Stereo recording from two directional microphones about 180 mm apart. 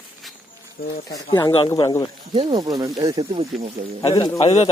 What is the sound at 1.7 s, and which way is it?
Speech, 25° left (ahead or behind).